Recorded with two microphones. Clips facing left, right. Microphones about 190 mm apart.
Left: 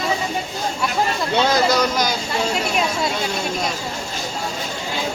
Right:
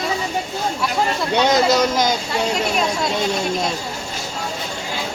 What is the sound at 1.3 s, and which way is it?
Speech, 15° right (ahead or behind).